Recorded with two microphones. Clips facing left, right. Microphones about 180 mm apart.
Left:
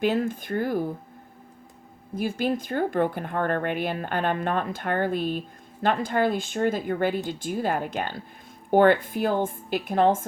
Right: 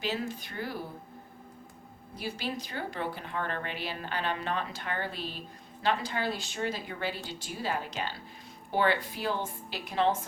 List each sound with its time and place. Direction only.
0.0 s speech: 55° left (ahead or behind)
2.1 s speech: 50° left (ahead or behind)